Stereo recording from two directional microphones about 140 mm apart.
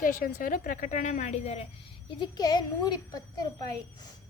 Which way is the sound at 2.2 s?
30° left (ahead or behind).